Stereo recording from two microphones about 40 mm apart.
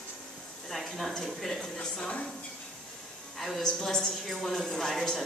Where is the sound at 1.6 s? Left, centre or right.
Left.